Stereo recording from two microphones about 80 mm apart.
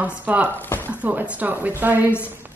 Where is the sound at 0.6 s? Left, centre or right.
Left.